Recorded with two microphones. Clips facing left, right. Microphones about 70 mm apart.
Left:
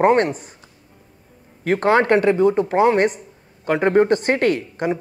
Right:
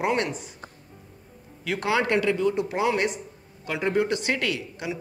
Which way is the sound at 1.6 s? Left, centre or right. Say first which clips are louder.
Left 8 dB; left.